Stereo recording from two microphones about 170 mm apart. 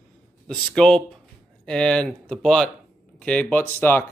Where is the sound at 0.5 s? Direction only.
5° left (ahead or behind).